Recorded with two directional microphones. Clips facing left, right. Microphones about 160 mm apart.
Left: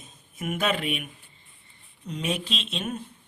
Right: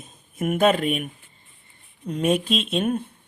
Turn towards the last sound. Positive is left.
turn(degrees=-55)  # may be behind; listen again after turning